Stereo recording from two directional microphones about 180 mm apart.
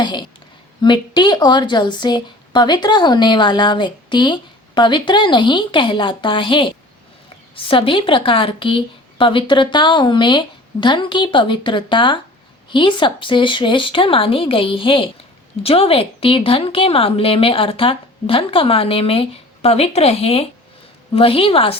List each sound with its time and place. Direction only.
0.0 s a woman's voice: 25° left (ahead or behind)